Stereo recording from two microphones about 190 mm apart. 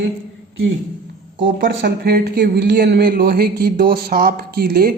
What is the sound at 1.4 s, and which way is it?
Speech, 60° right (ahead or behind).